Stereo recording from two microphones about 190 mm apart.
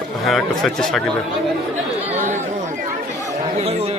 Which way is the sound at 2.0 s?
35° right (ahead or behind).